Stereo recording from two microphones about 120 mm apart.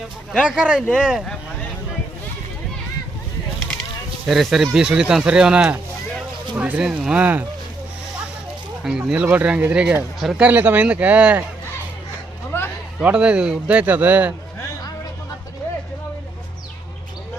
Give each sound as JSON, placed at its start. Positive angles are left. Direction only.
{"t": 0.4, "sound": "speech", "side_deg": -10}
{"t": 4.3, "sound": "speech", "side_deg": 0}
{"t": 8.8, "sound": "speech", "side_deg": -5}
{"t": 10.5, "sound": "speech", "side_deg": -15}
{"t": 12.5, "sound": "a sound", "side_deg": 20}
{"t": 13.0, "sound": "speech", "side_deg": -10}